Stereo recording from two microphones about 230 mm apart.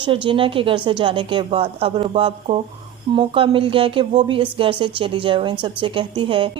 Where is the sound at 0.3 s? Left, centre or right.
Right.